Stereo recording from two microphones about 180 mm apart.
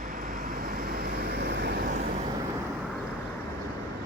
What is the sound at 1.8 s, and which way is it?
Vehicle, 45° right (ahead or behind).